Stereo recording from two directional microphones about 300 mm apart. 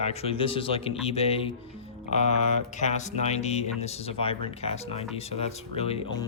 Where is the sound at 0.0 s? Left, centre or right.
Left.